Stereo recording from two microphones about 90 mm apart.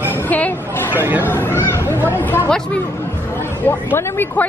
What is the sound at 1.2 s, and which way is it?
A woman's voice, 25° left (ahead or behind).